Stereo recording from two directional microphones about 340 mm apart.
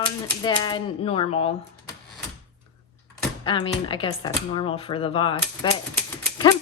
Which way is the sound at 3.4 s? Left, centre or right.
Centre.